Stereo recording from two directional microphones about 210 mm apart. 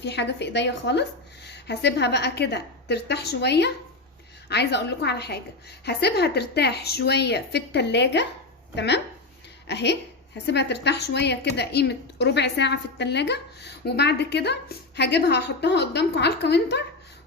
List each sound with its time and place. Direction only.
0.0 s a woman's voice: 55° left (ahead or behind)